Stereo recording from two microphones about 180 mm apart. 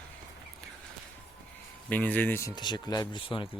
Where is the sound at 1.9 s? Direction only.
10° left (ahead or behind); by 3.4 s 25° left (ahead or behind).